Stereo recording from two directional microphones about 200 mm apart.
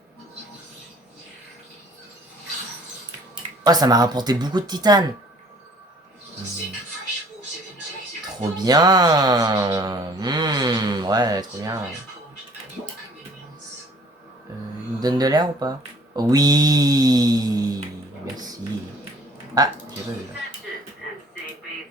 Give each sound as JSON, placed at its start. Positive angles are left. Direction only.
{"t": 3.6, "sound": "speech", "side_deg": -20}
{"t": 8.4, "sound": "speech", "side_deg": -20}
{"t": 15.0, "sound": "speech", "side_deg": -20}
{"t": 18.3, "sound": "a sound", "side_deg": -20}
{"t": 19.5, "sound": "speech", "side_deg": -20}